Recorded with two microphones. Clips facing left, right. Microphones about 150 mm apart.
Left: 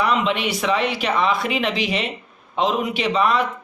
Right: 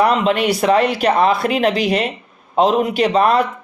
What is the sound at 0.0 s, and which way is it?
A man's voice, 45° right (ahead or behind).